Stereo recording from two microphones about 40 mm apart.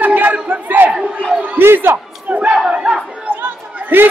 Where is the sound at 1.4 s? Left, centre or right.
Right.